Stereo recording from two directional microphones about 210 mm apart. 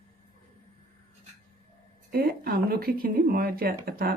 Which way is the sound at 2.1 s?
45° right (ahead or behind).